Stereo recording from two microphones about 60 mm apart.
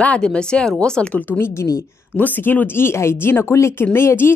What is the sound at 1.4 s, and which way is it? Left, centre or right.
Speech, left.